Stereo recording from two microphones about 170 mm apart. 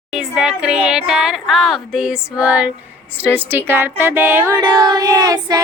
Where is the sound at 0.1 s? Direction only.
5° right (ahead or behind).